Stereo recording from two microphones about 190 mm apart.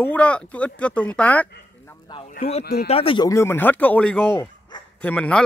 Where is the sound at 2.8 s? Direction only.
30° left (ahead or behind).